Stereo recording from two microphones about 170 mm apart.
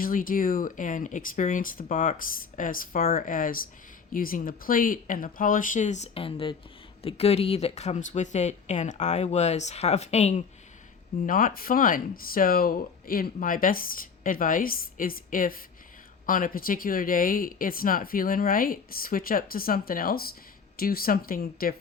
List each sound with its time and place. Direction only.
0.0 s speech: 55° left (ahead or behind)
11.3 s speech: 55° left (ahead or behind)